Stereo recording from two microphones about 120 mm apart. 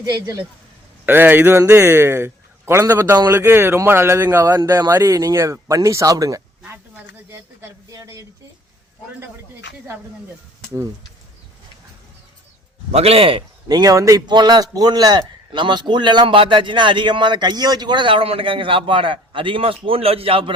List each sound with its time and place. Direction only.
1.0 s a man's voice: 15° right (ahead or behind)
6.7 s a sound: 20° right (ahead or behind)
7.9 s a man's voice: 25° right (ahead or behind)
12.9 s a man's voice: 55° right (ahead or behind)
13.7 s a man's voice: 30° right (ahead or behind); by 20.5 s 50° right (ahead or behind)